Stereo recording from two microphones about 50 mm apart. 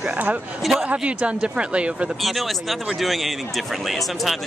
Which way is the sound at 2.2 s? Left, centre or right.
Centre.